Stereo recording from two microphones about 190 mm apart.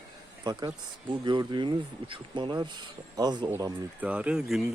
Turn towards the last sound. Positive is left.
turn(degrees=0)  # may be behind; listen again after turning